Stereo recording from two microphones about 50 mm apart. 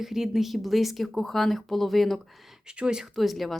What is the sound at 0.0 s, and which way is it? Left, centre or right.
Speech, centre.